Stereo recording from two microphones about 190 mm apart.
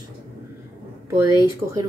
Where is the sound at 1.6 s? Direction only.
15° right (ahead or behind).